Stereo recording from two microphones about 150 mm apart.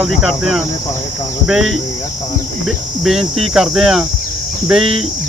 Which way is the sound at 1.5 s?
Centre (ahead or behind).